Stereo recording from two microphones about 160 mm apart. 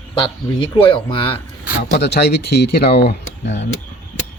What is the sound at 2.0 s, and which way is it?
Speech, 90° left.